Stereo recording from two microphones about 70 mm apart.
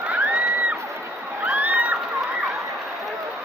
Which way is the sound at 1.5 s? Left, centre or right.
Centre.